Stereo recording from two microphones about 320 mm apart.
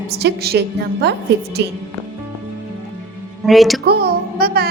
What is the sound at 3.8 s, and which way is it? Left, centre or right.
Music, right.